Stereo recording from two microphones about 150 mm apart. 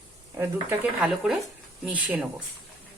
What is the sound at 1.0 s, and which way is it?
Speech, 5° right (ahead or behind).